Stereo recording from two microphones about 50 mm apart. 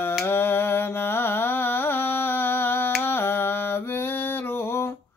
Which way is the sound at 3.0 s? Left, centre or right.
Left.